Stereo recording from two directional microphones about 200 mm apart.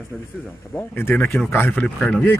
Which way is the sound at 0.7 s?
10° left (ahead or behind).